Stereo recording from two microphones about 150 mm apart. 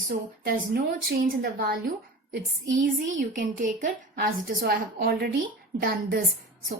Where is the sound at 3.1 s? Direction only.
60° right (ahead or behind).